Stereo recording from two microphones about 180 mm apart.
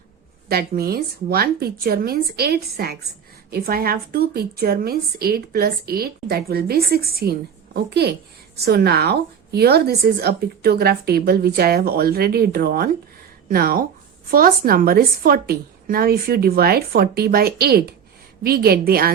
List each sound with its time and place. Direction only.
0.4 s a woman's voice: 60° right (ahead or behind)